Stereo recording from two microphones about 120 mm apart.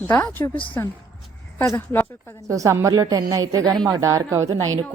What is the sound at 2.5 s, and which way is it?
A woman's voice, 25° right (ahead or behind).